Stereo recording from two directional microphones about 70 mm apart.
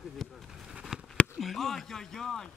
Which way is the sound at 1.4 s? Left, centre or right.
Centre.